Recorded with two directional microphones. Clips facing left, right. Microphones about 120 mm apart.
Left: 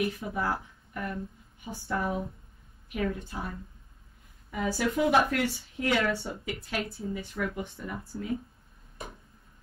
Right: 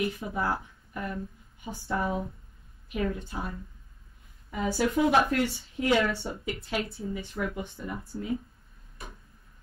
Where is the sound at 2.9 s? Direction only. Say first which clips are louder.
Right 1 dB; 25° right (ahead or behind).